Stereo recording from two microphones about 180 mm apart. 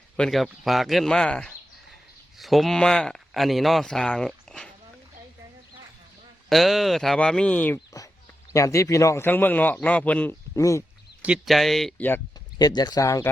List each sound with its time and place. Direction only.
0.2 s speech: centre (ahead or behind)
6.5 s a man's voice: centre (ahead or behind); by 10.8 s 15° left (ahead or behind)
11.2 s speech: centre (ahead or behind)
12.5 s speech: 20° left (ahead or behind)